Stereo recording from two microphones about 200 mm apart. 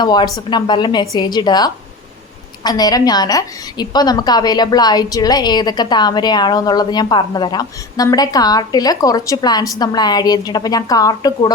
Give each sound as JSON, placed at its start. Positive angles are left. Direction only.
{"t": 0.0, "sound": "a woman's voice", "side_deg": 20}